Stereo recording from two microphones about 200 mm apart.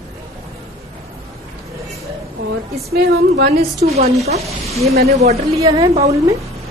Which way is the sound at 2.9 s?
50° right (ahead or behind).